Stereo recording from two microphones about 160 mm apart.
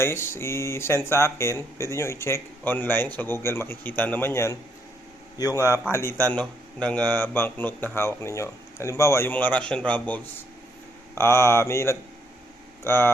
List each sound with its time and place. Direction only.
0.0 s a man's voice: 15° left (ahead or behind)